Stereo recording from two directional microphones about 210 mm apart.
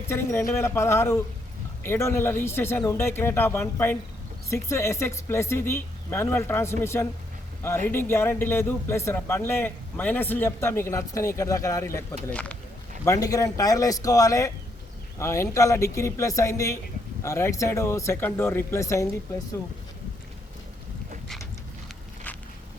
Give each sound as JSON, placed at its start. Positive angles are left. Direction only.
{"t": 0.1, "sound": "speech", "side_deg": 10}
{"t": 13.1, "sound": "speech", "side_deg": 15}